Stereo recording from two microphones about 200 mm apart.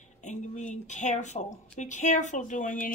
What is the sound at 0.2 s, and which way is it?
Speech, 35° left (ahead or behind).